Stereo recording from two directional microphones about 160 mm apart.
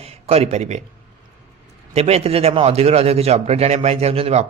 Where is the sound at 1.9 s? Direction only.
40° right (ahead or behind).